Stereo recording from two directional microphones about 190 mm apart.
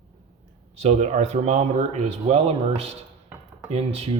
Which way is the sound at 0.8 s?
35° right (ahead or behind).